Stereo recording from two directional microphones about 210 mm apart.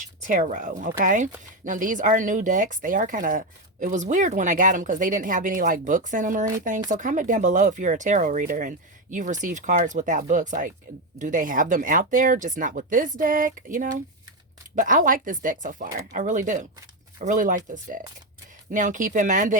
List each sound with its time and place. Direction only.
0.2 s speech: 35° right (ahead or behind)